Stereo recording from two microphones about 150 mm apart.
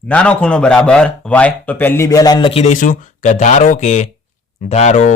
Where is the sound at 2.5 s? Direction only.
50° left (ahead or behind).